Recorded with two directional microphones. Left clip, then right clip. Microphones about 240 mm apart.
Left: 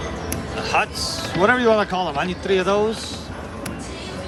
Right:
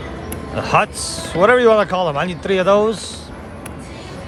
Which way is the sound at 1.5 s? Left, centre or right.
Right.